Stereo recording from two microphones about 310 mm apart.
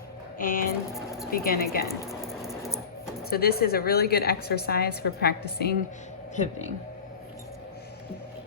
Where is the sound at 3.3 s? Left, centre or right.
Left.